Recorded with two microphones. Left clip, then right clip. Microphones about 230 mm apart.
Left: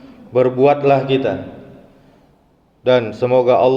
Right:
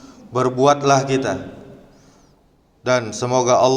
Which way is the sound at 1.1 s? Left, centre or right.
Right.